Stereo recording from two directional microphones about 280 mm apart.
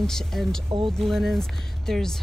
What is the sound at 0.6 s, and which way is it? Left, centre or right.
Speech, centre.